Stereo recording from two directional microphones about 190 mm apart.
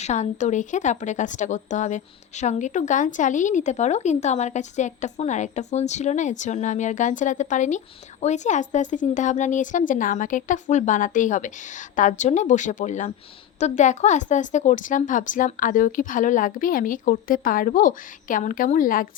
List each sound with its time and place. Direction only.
0.0 s a woman's voice: 40° left (ahead or behind)